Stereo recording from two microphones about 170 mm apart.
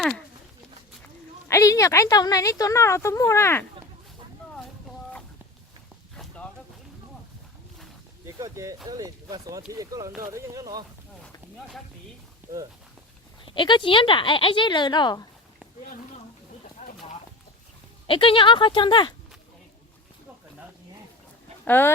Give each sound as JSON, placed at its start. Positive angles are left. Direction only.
{"t": 1.5, "sound": "speech", "side_deg": 20}
{"t": 6.1, "sound": "a sound", "side_deg": 5}
{"t": 8.4, "sound": "speech", "side_deg": -20}
{"t": 12.4, "sound": "walk", "side_deg": -10}
{"t": 13.4, "sound": "speech", "side_deg": 30}
{"t": 18.0, "sound": "speech", "side_deg": 30}
{"t": 21.6, "sound": "speech", "side_deg": 10}